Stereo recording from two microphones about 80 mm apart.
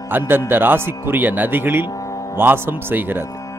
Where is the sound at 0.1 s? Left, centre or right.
Right.